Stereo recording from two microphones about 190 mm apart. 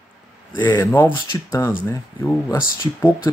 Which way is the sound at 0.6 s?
10° left (ahead or behind).